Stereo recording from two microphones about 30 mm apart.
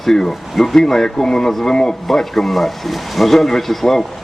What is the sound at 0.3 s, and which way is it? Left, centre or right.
Speech, centre.